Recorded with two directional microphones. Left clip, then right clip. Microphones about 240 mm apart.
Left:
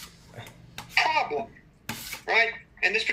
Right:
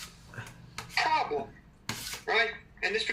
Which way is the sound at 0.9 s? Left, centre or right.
Left.